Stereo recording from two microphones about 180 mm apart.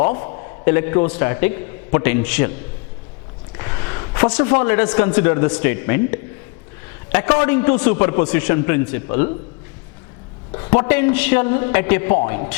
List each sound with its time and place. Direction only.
0.0 s a man's voice: 15° left (ahead or behind)
3.6 s a sound: 20° left (ahead or behind)
4.3 s a man's voice: 10° left (ahead or behind)
10.5 s a man's voice: 20° left (ahead or behind)